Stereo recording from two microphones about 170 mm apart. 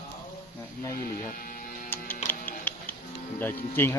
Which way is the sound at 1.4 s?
55° left (ahead or behind).